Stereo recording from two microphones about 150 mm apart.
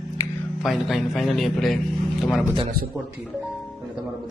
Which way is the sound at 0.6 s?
Centre (ahead or behind).